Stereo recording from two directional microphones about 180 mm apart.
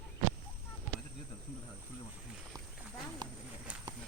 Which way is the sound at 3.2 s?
20° right (ahead or behind).